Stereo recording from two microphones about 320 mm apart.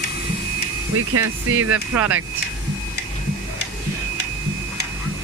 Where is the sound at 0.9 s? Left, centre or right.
Right.